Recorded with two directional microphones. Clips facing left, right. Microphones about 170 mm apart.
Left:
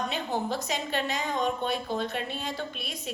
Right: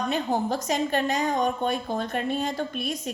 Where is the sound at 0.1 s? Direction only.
45° right (ahead or behind).